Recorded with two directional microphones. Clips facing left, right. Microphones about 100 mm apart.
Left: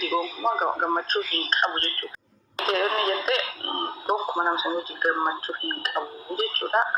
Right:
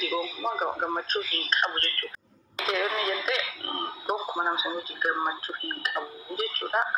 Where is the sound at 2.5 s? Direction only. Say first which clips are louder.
Left 4 dB; 40° left (ahead or behind).